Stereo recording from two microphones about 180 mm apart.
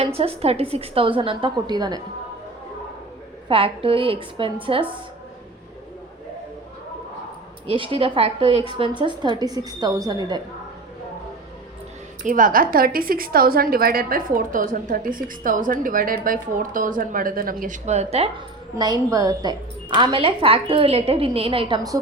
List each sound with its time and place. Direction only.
0.0 s a woman's voice: 35° right (ahead or behind)
3.5 s a woman's voice: 30° right (ahead or behind)
7.7 s a woman's voice: 30° right (ahead or behind)
12.2 s a woman's voice: 50° right (ahead or behind)
18.8 s a woman's voice: 20° right (ahead or behind)